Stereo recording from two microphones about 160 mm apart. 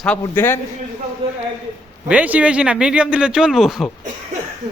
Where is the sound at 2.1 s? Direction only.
10° right (ahead or behind).